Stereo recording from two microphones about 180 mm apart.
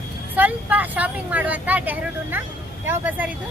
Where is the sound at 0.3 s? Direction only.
10° right (ahead or behind).